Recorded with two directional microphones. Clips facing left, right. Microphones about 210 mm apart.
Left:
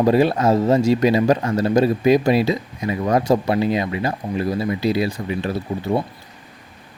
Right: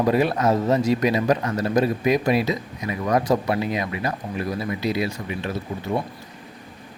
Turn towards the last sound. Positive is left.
turn(degrees=35)  # may be behind; listen again after turning